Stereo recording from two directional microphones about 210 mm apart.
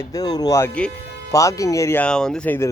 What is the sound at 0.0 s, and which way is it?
Speech, 15° left (ahead or behind).